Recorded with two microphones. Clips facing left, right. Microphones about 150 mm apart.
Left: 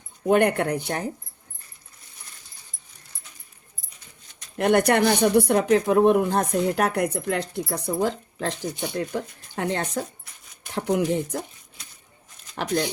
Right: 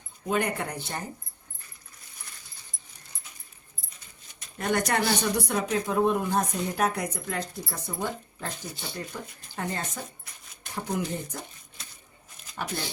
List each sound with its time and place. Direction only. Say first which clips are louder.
0.3 s speech: left 9 dB; 60° left (ahead or behind)
4.5 s speech: left 7 dB; 65° left (ahead or behind)